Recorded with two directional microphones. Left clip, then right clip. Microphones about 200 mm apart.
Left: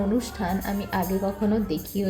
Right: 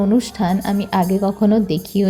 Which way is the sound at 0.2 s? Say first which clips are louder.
Right 8 dB; 40° right (ahead or behind).